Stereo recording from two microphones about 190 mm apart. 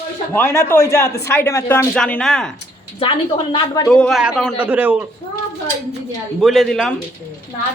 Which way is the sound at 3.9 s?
5° left (ahead or behind).